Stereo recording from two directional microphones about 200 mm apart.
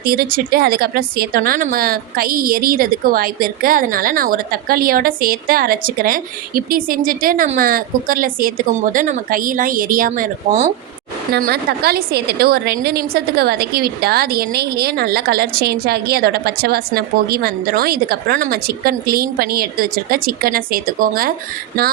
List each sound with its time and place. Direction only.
0.0 s speech: 50° right (ahead or behind)